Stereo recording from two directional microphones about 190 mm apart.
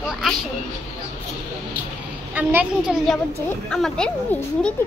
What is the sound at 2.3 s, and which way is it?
A child's voice, 5° right (ahead or behind).